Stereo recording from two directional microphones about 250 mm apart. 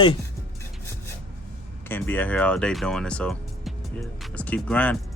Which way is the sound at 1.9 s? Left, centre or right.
Centre.